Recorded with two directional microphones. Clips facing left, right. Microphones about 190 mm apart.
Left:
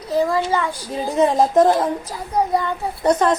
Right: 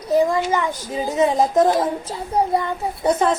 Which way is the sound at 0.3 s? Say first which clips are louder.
Even; 20° right (ahead or behind).